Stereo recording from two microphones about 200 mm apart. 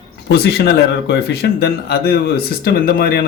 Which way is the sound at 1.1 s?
55° left (ahead or behind).